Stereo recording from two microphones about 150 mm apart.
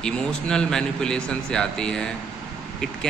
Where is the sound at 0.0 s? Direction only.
5° left (ahead or behind).